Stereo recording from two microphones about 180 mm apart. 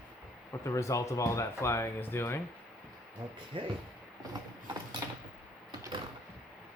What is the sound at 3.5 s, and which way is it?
Speech, 30° right (ahead or behind).